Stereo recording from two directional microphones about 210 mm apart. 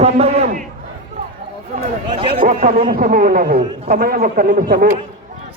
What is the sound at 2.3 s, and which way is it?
A man's voice, 40° right (ahead or behind).